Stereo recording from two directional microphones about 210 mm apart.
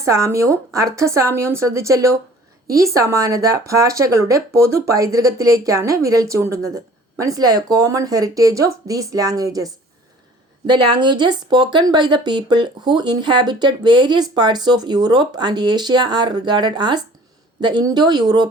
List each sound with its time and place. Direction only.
0.0 s speech: 15° right (ahead or behind)